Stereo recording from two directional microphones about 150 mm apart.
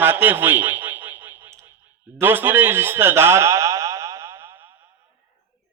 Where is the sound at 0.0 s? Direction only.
15° right (ahead or behind).